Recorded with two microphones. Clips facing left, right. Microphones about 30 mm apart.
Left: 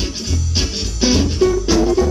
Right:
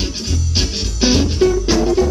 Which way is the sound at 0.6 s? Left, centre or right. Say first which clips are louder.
Right 1 dB; centre.